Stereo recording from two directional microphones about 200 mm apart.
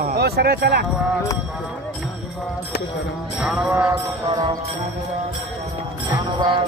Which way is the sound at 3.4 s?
5° right (ahead or behind).